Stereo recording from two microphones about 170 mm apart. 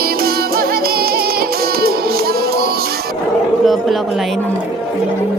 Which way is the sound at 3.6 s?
Centre (ahead or behind).